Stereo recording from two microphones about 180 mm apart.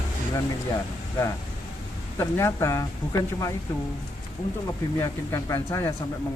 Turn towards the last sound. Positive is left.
turn(degrees=15)  # may be behind; listen again after turning